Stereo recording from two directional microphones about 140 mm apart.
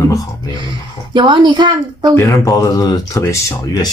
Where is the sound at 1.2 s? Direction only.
35° right (ahead or behind).